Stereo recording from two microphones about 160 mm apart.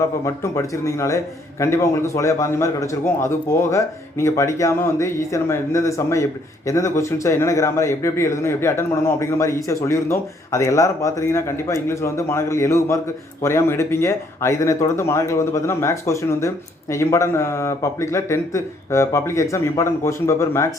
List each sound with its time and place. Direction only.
0.3 s a man's voice: 20° left (ahead or behind)